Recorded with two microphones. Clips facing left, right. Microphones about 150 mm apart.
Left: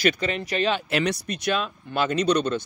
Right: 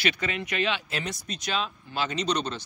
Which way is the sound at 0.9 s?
70° left (ahead or behind).